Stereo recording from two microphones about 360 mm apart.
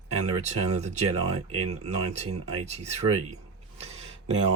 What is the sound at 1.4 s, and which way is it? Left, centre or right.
Speech, right.